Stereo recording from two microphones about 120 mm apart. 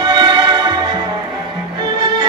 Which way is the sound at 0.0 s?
35° right (ahead or behind).